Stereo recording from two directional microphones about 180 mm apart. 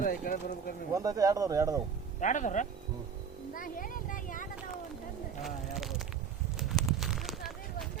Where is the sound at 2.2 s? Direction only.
45° left (ahead or behind).